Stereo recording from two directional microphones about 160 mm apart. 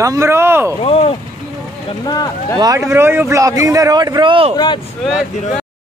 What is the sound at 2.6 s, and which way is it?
A man's voice, 20° right (ahead or behind).